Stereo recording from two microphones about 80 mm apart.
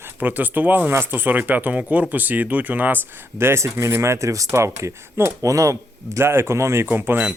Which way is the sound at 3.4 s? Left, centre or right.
Right.